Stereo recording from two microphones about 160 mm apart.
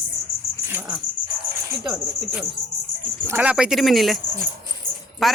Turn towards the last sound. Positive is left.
turn(degrees=0)  # may be behind; listen again after turning